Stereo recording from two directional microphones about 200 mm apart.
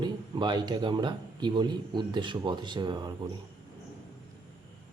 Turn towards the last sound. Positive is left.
turn(degrees=-20)  # may be behind; listen again after turning